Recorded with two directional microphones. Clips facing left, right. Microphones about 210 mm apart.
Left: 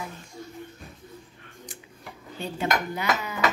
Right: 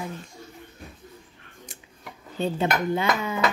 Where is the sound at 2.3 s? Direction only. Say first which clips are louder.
Right 3 dB; 25° right (ahead or behind).